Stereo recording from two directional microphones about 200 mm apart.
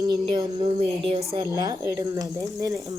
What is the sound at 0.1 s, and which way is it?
A woman's voice, 25° right (ahead or behind).